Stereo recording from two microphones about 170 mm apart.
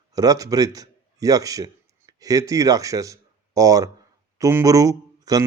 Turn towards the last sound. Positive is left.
turn(degrees=-20)  # may be behind; listen again after turning